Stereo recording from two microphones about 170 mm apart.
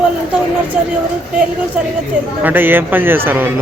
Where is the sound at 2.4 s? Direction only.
10° right (ahead or behind).